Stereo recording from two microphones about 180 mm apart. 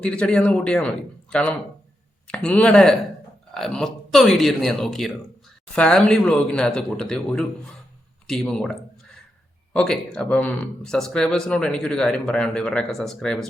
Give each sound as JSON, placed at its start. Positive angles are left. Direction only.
{"t": 0.0, "sound": "speech", "side_deg": 5}
{"t": 9.7, "sound": "speech", "side_deg": 5}